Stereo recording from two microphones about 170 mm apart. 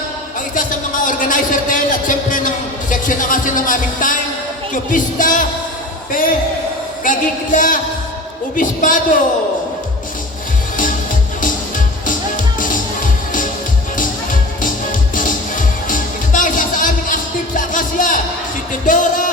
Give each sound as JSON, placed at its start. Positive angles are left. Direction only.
{"t": 0.3, "sound": "a man's voice", "side_deg": 50}
{"t": 12.5, "sound": "music", "side_deg": 50}